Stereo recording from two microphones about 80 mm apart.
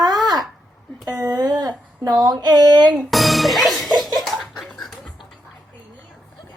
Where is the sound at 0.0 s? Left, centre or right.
Right.